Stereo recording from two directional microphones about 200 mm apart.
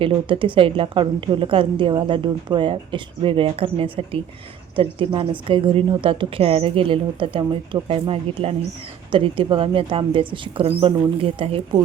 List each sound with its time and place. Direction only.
0.0 s a woman's voice: 25° right (ahead or behind)